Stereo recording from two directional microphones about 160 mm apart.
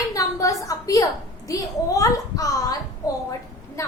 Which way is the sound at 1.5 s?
20° left (ahead or behind).